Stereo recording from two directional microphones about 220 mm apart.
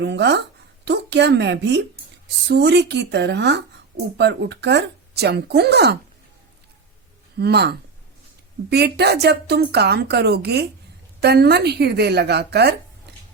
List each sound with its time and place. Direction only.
0.0 s speech: 50° right (ahead or behind)
7.3 s speech: 50° right (ahead or behind)
13.1 s a sound: 50° right (ahead or behind)